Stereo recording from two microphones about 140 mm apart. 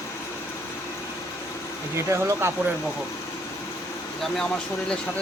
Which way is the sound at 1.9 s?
20° right (ahead or behind).